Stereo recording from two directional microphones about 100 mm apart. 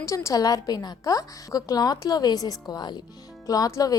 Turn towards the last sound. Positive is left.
turn(degrees=35)  # may be behind; listen again after turning